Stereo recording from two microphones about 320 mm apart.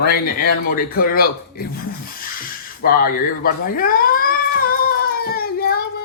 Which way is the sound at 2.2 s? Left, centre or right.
Left.